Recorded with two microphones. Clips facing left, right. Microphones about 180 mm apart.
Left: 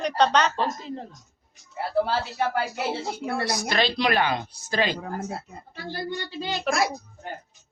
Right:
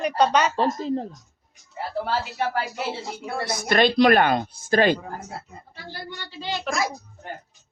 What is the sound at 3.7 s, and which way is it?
Speech, 55° right (ahead or behind).